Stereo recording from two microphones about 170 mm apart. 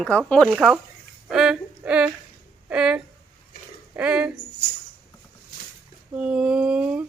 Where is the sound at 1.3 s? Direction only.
5° right (ahead or behind).